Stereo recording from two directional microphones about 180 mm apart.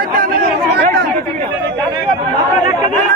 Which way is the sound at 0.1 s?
55° right (ahead or behind).